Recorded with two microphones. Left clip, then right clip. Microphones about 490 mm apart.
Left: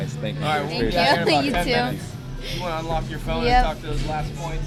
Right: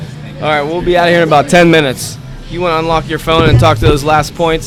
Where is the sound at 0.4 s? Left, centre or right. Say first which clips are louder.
Right 12 dB; right.